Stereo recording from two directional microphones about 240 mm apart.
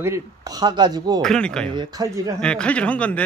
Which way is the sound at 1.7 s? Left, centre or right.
Centre.